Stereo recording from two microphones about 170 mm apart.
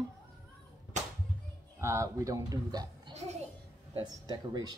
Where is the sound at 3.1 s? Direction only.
40° right (ahead or behind).